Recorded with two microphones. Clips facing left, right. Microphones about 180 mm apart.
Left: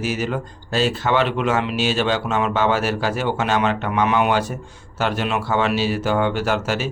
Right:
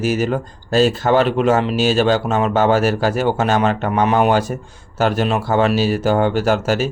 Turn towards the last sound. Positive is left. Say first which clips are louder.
# right 5 dB
turn(degrees=-40)  # may be behind; listen again after turning